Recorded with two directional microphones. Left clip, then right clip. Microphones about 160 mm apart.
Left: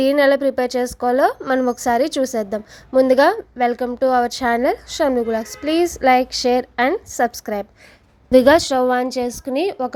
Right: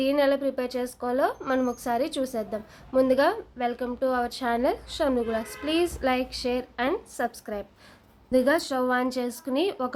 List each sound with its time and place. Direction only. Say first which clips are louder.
0.0 s a woman's voice: left 9 dB; 55° left (ahead or behind)
8.3 s a woman's voice: left 11 dB; 60° left (ahead or behind); by 9.9 s 30° left (ahead or behind)